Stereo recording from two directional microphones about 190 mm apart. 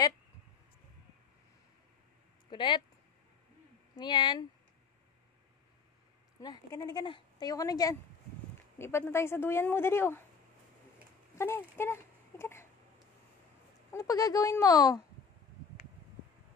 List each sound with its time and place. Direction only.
2.5 s speech: 25° left (ahead or behind)
3.9 s speech: 25° left (ahead or behind)
6.4 s speech: 20° left (ahead or behind)
11.3 s speech: 10° left (ahead or behind)
13.9 s speech: 20° left (ahead or behind)